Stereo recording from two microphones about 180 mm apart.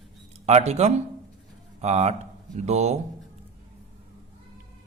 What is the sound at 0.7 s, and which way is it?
A man's voice, 35° right (ahead or behind).